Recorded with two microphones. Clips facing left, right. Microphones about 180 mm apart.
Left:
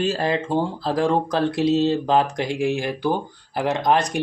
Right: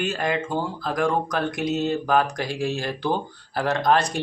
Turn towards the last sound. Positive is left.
turn(degrees=20)  # may be behind; listen again after turning